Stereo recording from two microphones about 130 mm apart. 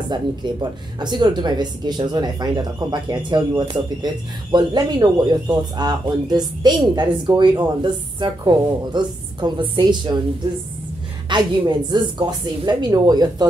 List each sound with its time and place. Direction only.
0.1 s speech: 35° right (ahead or behind)
11.2 s speech: 35° right (ahead or behind)